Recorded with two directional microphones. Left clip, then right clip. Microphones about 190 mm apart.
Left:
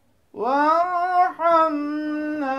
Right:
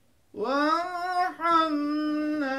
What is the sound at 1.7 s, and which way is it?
Humming, 10° right (ahead or behind).